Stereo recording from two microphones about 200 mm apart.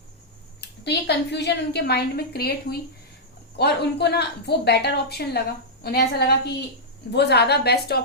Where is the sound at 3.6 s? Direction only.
55° left (ahead or behind).